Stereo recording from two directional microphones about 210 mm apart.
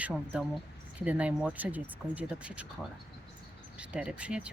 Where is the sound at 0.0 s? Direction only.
5° right (ahead or behind).